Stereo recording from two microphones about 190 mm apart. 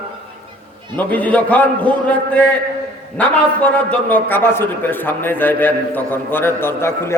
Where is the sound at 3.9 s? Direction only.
10° left (ahead or behind).